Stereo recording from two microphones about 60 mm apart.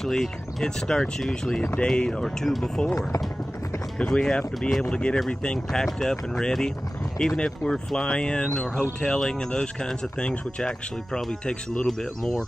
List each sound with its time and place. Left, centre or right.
0.0 s speech: centre